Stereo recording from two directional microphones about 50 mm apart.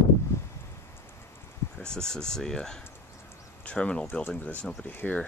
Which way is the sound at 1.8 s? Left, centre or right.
Centre.